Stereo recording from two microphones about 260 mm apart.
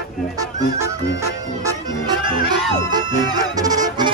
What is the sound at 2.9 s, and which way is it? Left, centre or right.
Music, centre.